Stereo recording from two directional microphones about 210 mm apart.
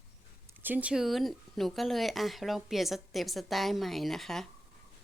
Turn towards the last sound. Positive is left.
turn(degrees=0)  # may be behind; listen again after turning